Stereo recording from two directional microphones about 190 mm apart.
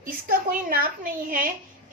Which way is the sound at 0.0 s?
50° right (ahead or behind).